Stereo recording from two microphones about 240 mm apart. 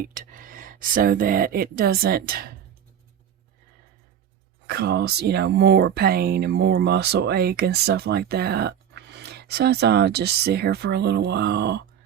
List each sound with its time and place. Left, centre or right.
0.0 s speech: right
4.6 s speech: right